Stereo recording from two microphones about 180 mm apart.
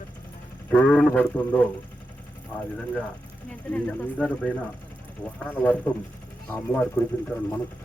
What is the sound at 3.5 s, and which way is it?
Speech, 5° left (ahead or behind).